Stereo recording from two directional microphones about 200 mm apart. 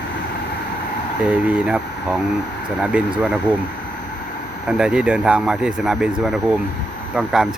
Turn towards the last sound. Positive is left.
turn(degrees=-5)  # may be behind; listen again after turning